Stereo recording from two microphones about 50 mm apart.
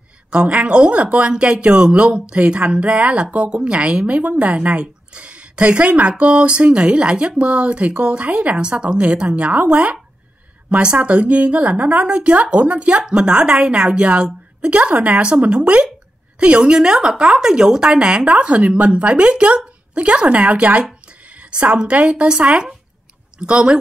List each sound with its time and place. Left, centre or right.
0.3 s a woman's voice: right
8.6 s a woman's voice: centre